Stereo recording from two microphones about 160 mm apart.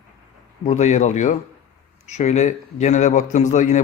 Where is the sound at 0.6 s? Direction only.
45° left (ahead or behind).